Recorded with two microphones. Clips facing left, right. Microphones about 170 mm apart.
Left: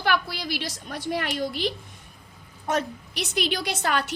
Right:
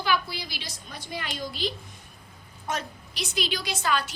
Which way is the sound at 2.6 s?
55° left (ahead or behind).